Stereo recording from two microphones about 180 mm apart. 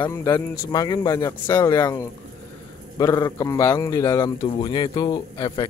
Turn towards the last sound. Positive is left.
turn(degrees=25)  # may be behind; listen again after turning